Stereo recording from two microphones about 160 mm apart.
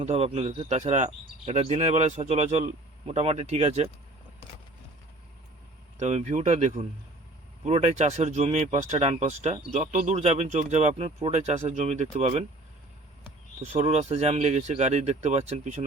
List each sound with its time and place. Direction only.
0.0 s speech: 40° right (ahead or behind)
6.0 s speech: 45° right (ahead or behind)
13.6 s speech: 40° right (ahead or behind)